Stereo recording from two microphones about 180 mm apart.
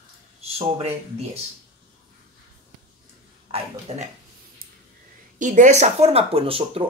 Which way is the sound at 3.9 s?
35° right (ahead or behind).